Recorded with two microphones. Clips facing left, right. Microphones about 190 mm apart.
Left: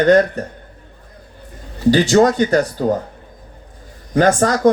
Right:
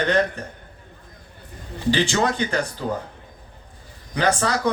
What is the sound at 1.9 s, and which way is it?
Speech, 40° left (ahead or behind).